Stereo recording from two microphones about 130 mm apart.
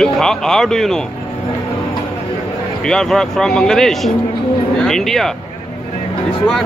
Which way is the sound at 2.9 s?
5° left (ahead or behind).